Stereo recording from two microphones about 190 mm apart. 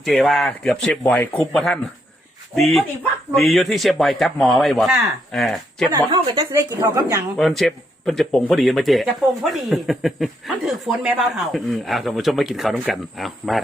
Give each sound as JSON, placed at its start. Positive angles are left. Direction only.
{"t": 0.0, "sound": "speech", "side_deg": 0}
{"t": 5.9, "sound": "speech", "side_deg": -25}
{"t": 7.3, "sound": "speech", "side_deg": 0}